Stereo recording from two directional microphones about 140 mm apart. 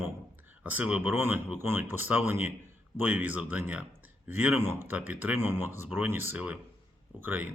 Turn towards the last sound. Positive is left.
turn(degrees=-15)  # may be behind; listen again after turning